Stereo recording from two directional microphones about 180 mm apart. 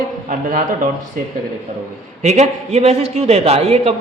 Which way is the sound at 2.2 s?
40° right (ahead or behind).